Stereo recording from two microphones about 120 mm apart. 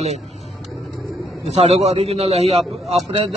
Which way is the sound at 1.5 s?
65° right (ahead or behind).